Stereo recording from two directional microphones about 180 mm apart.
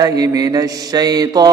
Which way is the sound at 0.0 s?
20° right (ahead or behind).